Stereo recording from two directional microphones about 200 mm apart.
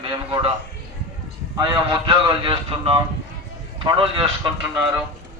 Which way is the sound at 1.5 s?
20° right (ahead or behind).